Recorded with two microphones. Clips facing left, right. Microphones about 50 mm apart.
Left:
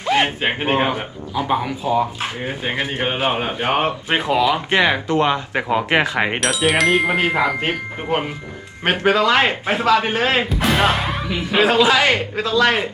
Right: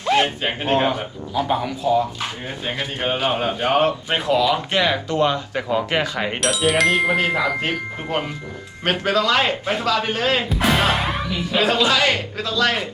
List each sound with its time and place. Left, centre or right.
0.0 s a sound: centre
0.7 s speech: centre
6.4 s chime: centre
7.2 s a man's voice: centre
10.5 s music: centre
11.3 s a man's voice: centre